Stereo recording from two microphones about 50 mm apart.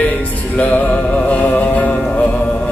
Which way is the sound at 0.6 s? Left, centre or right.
Left.